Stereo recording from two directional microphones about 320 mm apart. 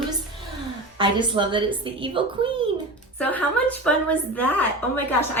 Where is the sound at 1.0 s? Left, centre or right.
Centre.